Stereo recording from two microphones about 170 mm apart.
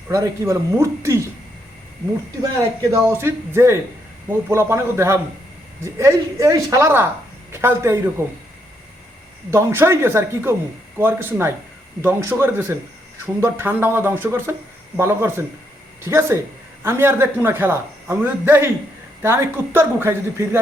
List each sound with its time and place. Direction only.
0.1 s a man's voice: 20° right (ahead or behind)
2.6 s a man's voice: 15° right (ahead or behind)
9.5 s a man's voice: 15° right (ahead or behind)